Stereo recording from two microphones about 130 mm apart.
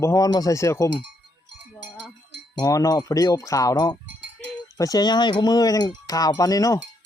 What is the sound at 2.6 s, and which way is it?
Speech, 25° left (ahead or behind).